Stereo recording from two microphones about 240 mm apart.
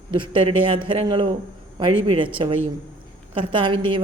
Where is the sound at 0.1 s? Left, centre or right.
Right.